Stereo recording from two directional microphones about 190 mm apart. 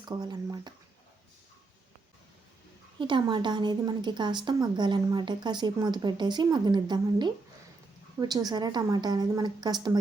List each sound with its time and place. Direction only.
0.0 s a woman's voice: 20° right (ahead or behind)
3.0 s a woman's voice: 25° right (ahead or behind)